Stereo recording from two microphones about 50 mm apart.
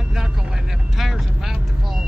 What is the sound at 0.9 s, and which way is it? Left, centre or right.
Vehicle, centre.